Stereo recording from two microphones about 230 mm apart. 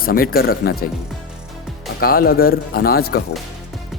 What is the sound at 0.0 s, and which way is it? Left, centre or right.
Speech, left.